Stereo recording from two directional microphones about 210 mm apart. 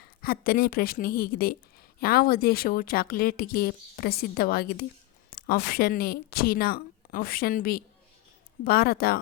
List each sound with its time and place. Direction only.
0.0 s speech: 45° left (ahead or behind)